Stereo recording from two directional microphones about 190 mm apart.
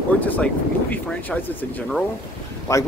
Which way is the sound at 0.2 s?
10° left (ahead or behind).